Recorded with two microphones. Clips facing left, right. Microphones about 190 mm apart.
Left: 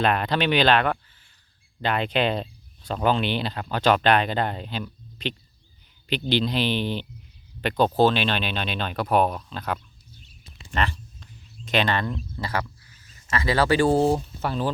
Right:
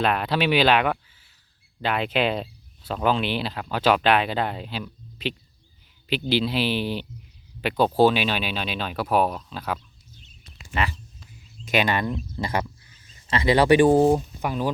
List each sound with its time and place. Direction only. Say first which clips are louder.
0.0 s speech: even; 5° right (ahead or behind)
10.7 s a sound: even; 10° right (ahead or behind)
14.1 s speech: right 2 dB; 10° right (ahead or behind)